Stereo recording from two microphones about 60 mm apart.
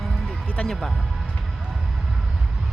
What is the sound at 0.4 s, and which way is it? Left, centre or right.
Music, left.